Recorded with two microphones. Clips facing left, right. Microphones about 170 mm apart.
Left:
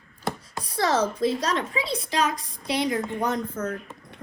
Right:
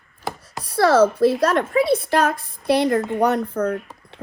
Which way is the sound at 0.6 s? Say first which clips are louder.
Right 8 dB; 60° right (ahead or behind).